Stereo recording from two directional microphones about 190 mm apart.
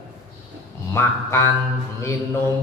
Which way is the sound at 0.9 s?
15° left (ahead or behind).